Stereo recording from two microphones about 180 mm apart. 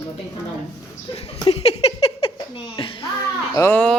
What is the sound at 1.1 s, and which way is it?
Speech, 30° left (ahead or behind).